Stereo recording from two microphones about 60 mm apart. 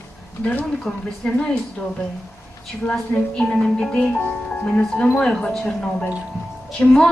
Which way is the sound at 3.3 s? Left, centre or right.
Centre.